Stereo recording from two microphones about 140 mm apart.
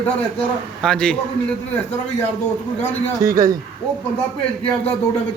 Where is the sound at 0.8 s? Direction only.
5° left (ahead or behind).